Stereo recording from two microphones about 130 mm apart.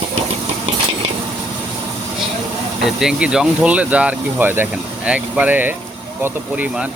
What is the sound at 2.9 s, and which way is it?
Speech, 5° right (ahead or behind).